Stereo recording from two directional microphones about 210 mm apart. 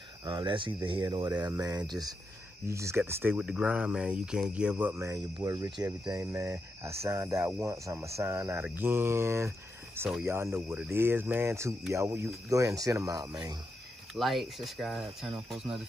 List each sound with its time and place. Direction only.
0.2 s speech: 20° right (ahead or behind)
14.1 s speech: centre (ahead or behind)